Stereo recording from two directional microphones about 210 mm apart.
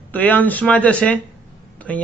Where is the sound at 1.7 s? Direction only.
5° left (ahead or behind).